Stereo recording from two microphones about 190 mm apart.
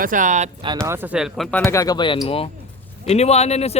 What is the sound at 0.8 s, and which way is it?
Speech, 10° right (ahead or behind).